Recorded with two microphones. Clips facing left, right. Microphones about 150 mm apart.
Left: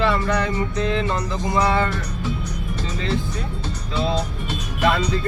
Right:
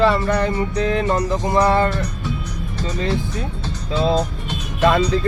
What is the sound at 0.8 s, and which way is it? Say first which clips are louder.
Music: right 6 dB; 45° right (ahead or behind).